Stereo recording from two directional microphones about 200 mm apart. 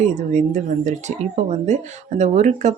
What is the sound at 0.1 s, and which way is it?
Speech, 35° right (ahead or behind).